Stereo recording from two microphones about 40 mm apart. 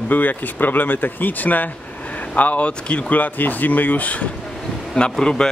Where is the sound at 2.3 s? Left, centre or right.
Left.